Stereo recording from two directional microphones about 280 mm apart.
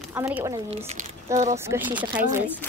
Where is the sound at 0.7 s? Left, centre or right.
Right.